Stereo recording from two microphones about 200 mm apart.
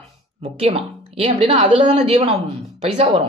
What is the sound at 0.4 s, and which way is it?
A man's voice, 30° right (ahead or behind).